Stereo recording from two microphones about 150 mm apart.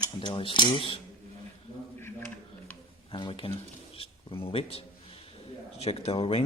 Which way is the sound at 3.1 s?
35° left (ahead or behind).